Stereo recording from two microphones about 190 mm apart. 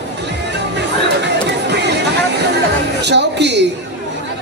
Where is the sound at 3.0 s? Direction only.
65° right (ahead or behind).